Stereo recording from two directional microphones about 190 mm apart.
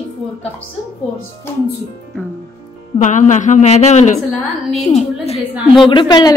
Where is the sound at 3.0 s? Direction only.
40° left (ahead or behind).